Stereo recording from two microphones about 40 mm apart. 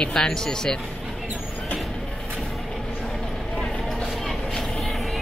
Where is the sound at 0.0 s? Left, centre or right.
Centre.